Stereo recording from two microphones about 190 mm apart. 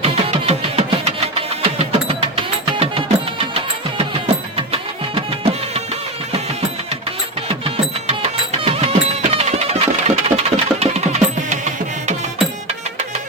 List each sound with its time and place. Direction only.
0.0 s music: 35° right (ahead or behind)
8.0 s music: 35° right (ahead or behind)